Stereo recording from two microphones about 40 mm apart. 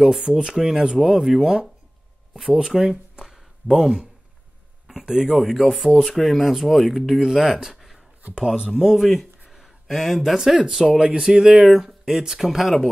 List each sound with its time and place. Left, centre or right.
0.2 s speech: centre
5.0 s speech: centre
5.4 s speech: centre
6.1 s speech: centre
7.7 s a sound: centre
8.4 s speech: centre
8.9 s speech: centre
9.5 s a sound: centre
10.3 s speech: centre